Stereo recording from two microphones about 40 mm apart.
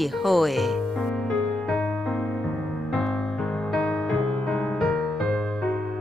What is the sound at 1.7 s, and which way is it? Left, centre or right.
Music, centre.